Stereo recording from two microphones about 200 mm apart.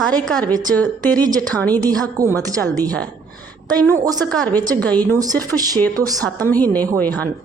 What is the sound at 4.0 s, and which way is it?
Speech, 20° right (ahead or behind).